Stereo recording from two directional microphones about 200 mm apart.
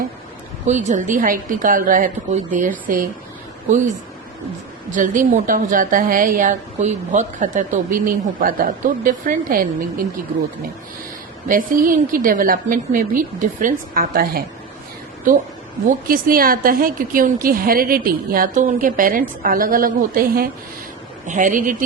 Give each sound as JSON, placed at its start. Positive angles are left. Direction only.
{"t": 0.7, "sound": "a woman's voice", "side_deg": -35}
{"t": 4.9, "sound": "a woman's voice", "side_deg": -40}
{"t": 11.4, "sound": "a woman's voice", "side_deg": -45}